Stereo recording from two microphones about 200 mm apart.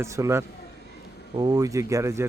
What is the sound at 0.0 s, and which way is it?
Speech, 15° right (ahead or behind).